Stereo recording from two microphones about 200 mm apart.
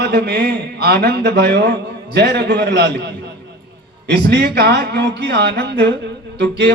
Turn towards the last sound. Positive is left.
turn(degrees=-55)  # may be behind; listen again after turning